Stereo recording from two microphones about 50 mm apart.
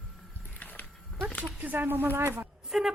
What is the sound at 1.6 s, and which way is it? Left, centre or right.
Speech, right.